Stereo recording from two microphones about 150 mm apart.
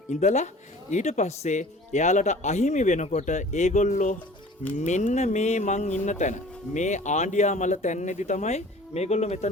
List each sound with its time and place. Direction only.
0.1 s speech: 50° left (ahead or behind)